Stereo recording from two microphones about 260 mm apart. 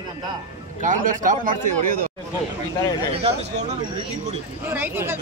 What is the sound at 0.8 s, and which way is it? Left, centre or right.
A man's voice, right.